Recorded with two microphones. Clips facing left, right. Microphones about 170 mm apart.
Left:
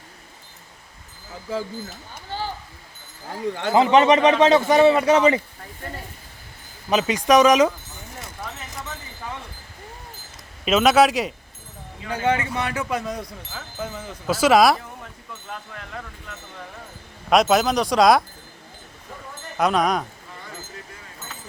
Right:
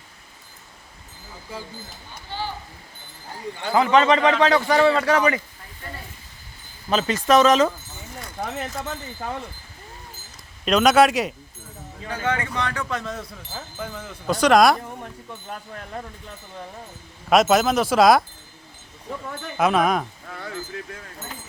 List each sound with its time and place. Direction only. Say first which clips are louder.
2.3 s a sound: left 1 dB; 45° left (ahead or behind)
3.7 s a man's voice: left 2 dB; 20° left (ahead or behind)
6.9 s speech: left 1 dB; 15° left (ahead or behind)
8.4 s speech: right 8 dB; 50° right (ahead or behind)
10.7 s speech: even; centre (ahead or behind)
12.1 s speech: left 3 dB; 15° left (ahead or behind)
13.7 s speech: left 4 dB; 5° left (ahead or behind)
15.3 s speech: right 1 dB; 30° right (ahead or behind)
17.2 s speech: even; centre (ahead or behind)
19.5 s speech: right 1 dB; 5° right (ahead or behind)